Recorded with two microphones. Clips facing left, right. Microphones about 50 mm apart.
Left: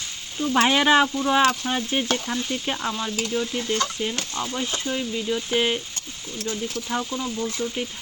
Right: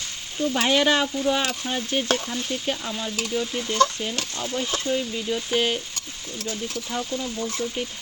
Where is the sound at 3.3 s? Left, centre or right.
Centre.